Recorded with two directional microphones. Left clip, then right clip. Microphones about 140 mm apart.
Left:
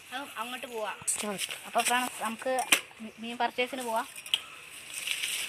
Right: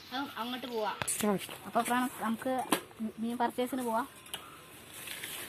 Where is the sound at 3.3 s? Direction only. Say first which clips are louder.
Left 3 dB; 20° right (ahead or behind).